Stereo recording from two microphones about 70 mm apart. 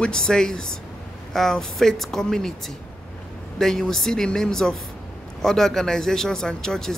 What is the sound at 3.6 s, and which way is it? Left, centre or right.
Speech, centre.